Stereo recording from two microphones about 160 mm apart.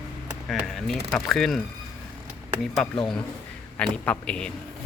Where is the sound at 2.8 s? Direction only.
5° left (ahead or behind).